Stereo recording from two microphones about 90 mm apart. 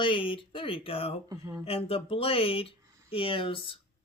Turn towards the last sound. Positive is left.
turn(degrees=75)  # may be behind; listen again after turning